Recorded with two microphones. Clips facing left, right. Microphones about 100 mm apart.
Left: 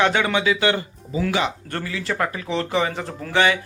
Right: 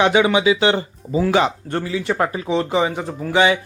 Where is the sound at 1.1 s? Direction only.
35° right (ahead or behind).